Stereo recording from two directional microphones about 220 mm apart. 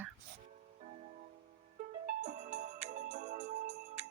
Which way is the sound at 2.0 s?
35° right (ahead or behind).